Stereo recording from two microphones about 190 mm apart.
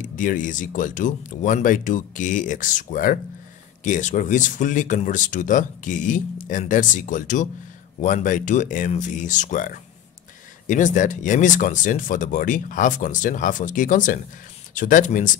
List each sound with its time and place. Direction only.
0.0 s speech: 45° left (ahead or behind)